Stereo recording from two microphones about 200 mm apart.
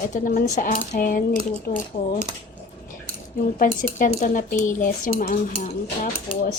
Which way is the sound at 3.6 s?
40° left (ahead or behind).